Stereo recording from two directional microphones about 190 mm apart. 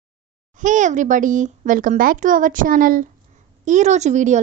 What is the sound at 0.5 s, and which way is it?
A child's voice, 40° right (ahead or behind).